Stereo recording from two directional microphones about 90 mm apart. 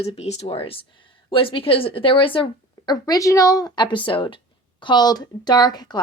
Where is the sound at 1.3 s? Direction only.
80° left.